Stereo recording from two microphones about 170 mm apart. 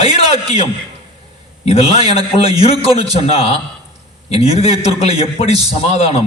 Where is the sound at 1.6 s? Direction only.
35° left (ahead or behind).